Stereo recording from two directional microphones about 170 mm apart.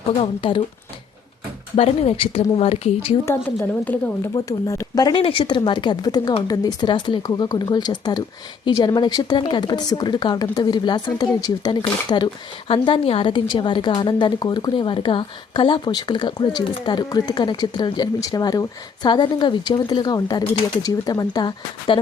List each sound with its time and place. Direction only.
0.2 s speech: 30° left (ahead or behind)
1.7 s speech: 35° left (ahead or behind)
3.2 s a woman's voice: 15° left (ahead or behind)